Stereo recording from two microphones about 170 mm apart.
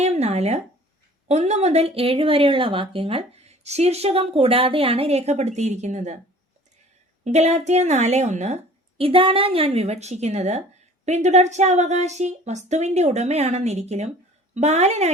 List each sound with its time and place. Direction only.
0.0 s a sound: 40° right (ahead or behind)
1.3 s speech: 40° right (ahead or behind)
7.3 s speech: 40° right (ahead or behind)